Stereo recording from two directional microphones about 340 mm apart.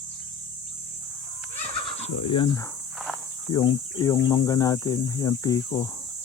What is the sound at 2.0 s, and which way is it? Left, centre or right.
Speech, centre.